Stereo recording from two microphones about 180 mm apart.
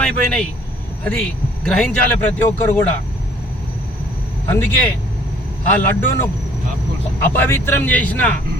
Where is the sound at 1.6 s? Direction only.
5° left (ahead or behind).